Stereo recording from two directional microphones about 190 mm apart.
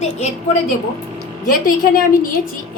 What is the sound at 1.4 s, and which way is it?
Speech, 50° left (ahead or behind).